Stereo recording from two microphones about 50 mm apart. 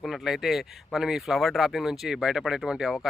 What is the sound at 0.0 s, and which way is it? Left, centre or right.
Speech, centre.